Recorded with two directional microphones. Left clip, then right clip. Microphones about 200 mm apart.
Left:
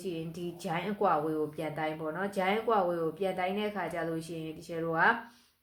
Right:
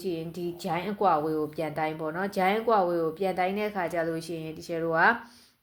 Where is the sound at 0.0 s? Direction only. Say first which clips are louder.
Right 5 dB; 35° right (ahead or behind).